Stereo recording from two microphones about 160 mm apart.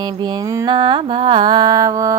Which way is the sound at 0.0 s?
25° right (ahead or behind).